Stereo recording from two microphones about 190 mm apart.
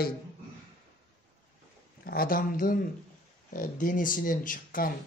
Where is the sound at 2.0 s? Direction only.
50° left (ahead or behind).